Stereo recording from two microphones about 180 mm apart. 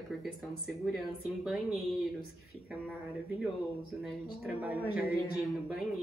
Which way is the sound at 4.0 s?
5° right (ahead or behind).